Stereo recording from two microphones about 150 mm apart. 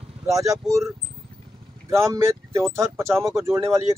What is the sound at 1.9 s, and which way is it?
Speech, 20° right (ahead or behind).